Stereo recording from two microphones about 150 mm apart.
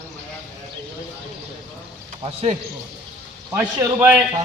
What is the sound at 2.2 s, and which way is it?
Speech, 40° right (ahead or behind).